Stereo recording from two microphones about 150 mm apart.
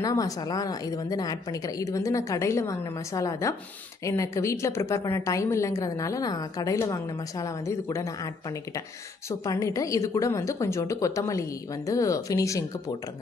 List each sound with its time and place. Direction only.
0.0 s a woman's voice: 25° left (ahead or behind)
9.3 s a woman's voice: 20° left (ahead or behind)